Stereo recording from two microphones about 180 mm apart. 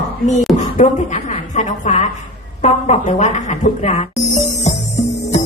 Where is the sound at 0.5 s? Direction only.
40° left (ahead or behind).